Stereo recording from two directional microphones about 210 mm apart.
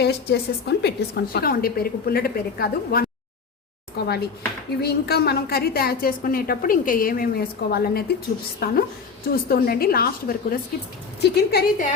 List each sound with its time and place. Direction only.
0.0 s a woman's voice: 50° left (ahead or behind)